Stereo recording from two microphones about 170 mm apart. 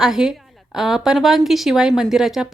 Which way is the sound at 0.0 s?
5° right (ahead or behind).